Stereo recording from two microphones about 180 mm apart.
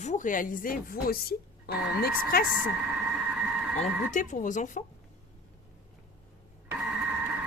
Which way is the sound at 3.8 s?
45° left (ahead or behind).